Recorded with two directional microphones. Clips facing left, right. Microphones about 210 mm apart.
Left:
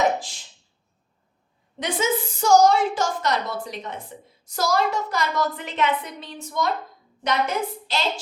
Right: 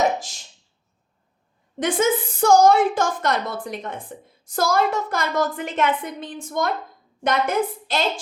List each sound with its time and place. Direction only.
1.8 s a woman's voice: 55° right (ahead or behind)